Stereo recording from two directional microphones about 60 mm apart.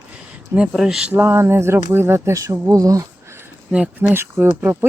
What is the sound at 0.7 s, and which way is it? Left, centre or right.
Speech, centre.